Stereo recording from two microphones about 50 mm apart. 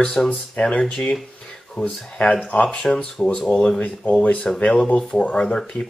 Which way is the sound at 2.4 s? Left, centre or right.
Left.